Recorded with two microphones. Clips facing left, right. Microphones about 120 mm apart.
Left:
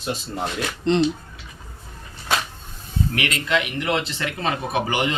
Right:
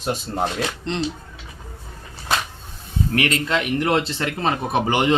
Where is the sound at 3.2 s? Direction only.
40° right (ahead or behind).